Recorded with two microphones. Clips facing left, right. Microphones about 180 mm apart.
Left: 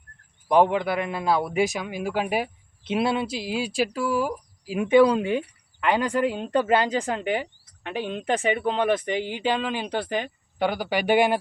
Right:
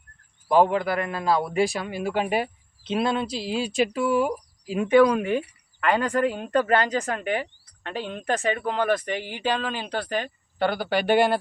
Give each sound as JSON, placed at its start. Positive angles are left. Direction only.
{"t": 0.4, "sound": "speech", "side_deg": 20}